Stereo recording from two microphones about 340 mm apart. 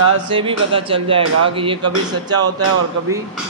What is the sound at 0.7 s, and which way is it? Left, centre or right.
A man's voice, centre.